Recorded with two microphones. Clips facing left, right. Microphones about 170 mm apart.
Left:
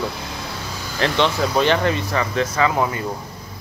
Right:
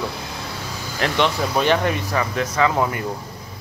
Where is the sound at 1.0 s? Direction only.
10° right (ahead or behind).